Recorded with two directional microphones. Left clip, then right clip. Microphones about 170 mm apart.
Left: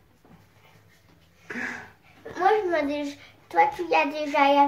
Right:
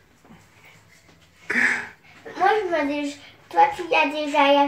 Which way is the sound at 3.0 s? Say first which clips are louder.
Right 3 dB; 15° left (ahead or behind).